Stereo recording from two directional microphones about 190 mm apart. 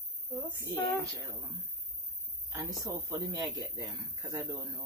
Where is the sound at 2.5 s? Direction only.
20° right (ahead or behind).